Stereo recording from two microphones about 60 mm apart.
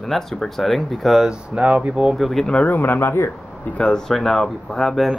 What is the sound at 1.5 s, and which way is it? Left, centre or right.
Speech, centre.